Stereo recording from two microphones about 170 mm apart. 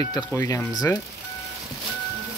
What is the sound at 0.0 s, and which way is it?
Speech, 25° left (ahead or behind).